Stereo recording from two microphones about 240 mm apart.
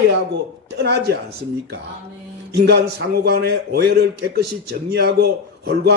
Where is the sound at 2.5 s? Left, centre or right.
Right.